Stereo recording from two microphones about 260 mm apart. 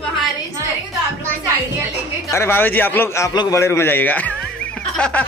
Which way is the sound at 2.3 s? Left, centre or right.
Centre.